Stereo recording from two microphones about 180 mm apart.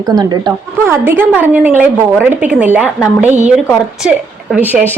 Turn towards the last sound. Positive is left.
turn(degrees=-10)  # may be behind; listen again after turning